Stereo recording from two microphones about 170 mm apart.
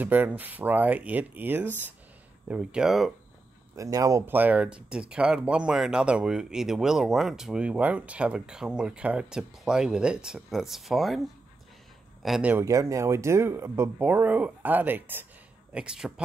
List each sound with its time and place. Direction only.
0.0 s speech: 10° right (ahead or behind)
3.7 s speech: 20° right (ahead or behind)
12.6 s speech: 20° right (ahead or behind)